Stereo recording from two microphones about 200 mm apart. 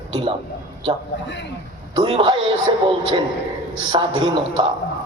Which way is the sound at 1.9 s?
20° right (ahead or behind).